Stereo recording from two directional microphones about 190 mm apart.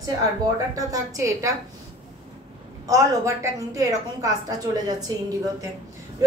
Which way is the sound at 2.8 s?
15° right (ahead or behind).